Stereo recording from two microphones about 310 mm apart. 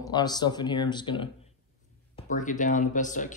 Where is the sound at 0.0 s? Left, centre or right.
Centre.